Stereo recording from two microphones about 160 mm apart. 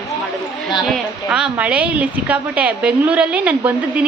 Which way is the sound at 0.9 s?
5° right (ahead or behind).